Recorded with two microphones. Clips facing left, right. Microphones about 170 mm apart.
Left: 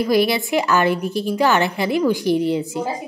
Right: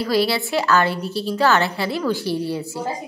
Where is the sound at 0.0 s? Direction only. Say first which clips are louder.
Left 3 dB; 15° left (ahead or behind).